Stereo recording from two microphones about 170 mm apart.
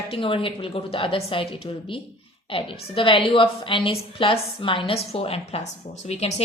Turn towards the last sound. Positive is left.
turn(degrees=40)  # may be behind; listen again after turning